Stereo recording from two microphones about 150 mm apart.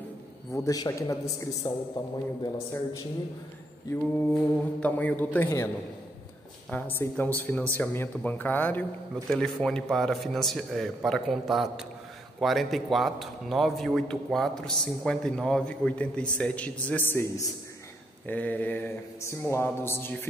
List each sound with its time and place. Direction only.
0.5 s a man's voice: 20° left (ahead or behind)
3.9 s mantra: 10° left (ahead or behind)
6.7 s mantra: 15° left (ahead or behind)
9.3 s a man's voice: 5° left (ahead or behind)
16.3 s mantra: 10° left (ahead or behind)